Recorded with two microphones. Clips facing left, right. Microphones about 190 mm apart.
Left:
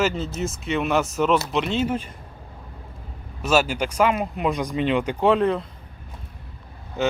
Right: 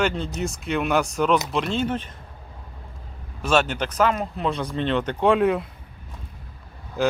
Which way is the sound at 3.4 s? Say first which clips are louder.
Left 1 dB; 5° left (ahead or behind).